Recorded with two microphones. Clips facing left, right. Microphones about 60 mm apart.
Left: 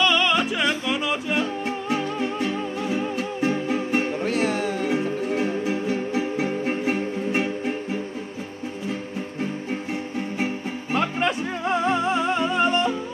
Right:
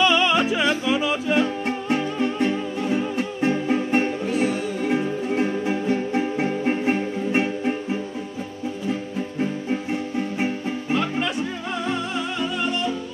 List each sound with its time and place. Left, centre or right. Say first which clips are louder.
0.0 s music: right 2 dB; centre
2.4 s music: right 3 dB; right
4.2 s music: even; left
4.8 s music: right 1 dB; right
10.9 s music: left 1 dB; left